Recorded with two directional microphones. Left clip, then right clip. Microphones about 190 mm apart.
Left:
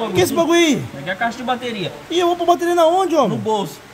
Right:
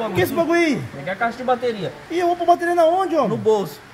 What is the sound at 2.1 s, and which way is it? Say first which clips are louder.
Speech: left 1 dB; 20° left (ahead or behind).